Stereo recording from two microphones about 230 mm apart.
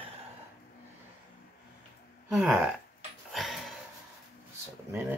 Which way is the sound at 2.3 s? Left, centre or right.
Centre.